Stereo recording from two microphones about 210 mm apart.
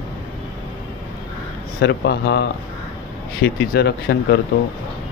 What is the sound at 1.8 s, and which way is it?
Speech, 55° left (ahead or behind).